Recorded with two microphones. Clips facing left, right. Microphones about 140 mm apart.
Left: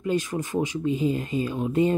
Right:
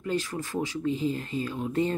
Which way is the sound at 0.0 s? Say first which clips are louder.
Left 4 dB; 15° left (ahead or behind).